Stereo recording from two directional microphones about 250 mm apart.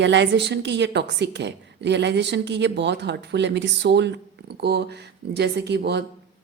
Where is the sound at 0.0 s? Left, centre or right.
Right.